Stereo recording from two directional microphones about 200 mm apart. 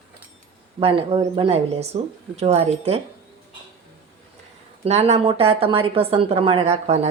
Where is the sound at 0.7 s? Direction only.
30° right (ahead or behind).